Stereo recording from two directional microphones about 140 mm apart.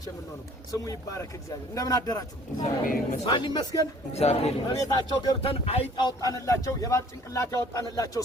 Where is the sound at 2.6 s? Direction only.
65° left (ahead or behind).